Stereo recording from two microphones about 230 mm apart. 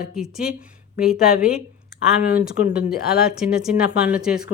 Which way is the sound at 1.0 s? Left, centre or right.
Centre.